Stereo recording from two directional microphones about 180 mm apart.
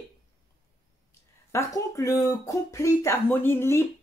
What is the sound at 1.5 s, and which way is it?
A woman's voice, 15° left (ahead or behind).